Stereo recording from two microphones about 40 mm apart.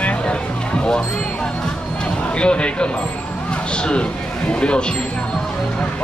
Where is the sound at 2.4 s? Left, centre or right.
Left.